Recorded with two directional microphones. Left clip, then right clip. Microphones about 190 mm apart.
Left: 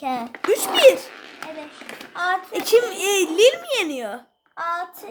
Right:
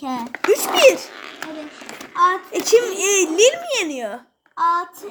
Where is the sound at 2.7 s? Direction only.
Centre (ahead or behind).